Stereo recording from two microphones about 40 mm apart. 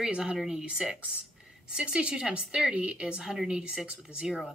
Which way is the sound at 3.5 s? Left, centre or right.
Right.